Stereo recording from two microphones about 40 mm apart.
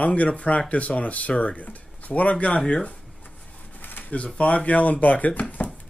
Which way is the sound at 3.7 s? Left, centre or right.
Left.